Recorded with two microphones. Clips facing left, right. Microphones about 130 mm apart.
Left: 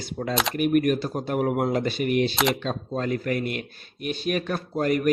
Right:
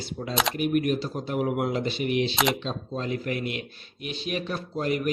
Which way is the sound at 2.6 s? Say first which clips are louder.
Left 3 dB; 50° left (ahead or behind).